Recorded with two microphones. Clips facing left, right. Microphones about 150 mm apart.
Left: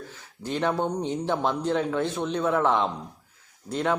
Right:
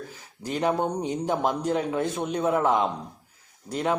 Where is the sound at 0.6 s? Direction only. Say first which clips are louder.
Right 1 dB; 15° right (ahead or behind).